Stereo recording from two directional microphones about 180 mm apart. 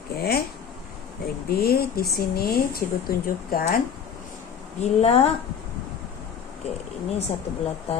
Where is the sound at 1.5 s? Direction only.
60° left (ahead or behind).